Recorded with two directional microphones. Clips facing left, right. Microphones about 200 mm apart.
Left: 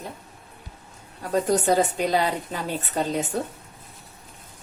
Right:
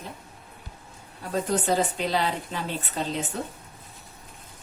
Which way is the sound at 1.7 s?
45° left (ahead or behind).